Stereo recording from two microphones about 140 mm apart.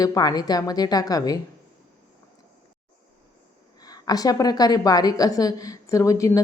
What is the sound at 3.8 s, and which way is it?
A woman's voice, 25° left (ahead or behind).